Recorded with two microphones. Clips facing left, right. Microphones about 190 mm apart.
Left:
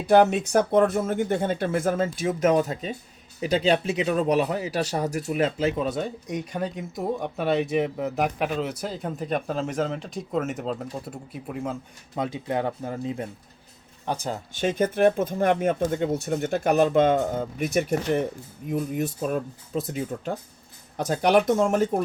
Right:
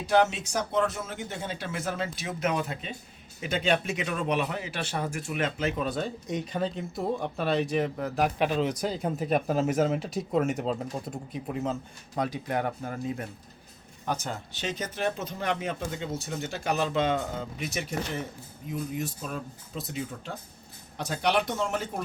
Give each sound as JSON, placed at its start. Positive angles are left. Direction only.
{"t": 0.0, "sound": "speech", "side_deg": 55}
{"t": 8.2, "sound": "speech", "side_deg": 5}
{"t": 12.1, "sound": "speech", "side_deg": 20}
{"t": 14.5, "sound": "speech", "side_deg": 50}